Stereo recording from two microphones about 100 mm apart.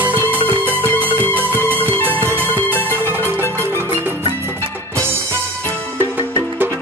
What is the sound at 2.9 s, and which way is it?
Music, 20° right (ahead or behind).